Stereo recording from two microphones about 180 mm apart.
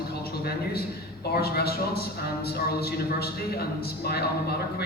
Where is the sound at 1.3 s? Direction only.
60° left (ahead or behind).